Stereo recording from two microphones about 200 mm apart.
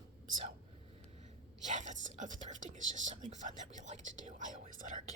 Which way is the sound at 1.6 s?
35° right (ahead or behind).